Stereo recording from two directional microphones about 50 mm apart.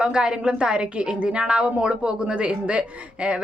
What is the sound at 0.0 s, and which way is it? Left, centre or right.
A woman's voice, centre.